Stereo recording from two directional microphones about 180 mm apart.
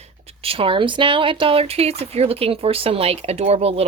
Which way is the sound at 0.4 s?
30° right (ahead or behind).